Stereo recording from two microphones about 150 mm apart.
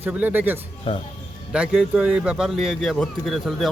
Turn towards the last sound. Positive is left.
turn(degrees=0)  # may be behind; listen again after turning